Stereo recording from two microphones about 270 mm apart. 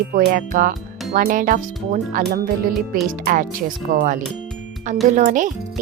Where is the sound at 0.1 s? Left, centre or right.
Right.